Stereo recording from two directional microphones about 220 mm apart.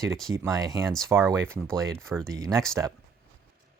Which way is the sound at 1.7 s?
5° left (ahead or behind).